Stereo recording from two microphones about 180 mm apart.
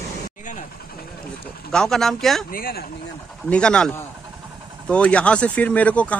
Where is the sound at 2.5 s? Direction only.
55° left (ahead or behind).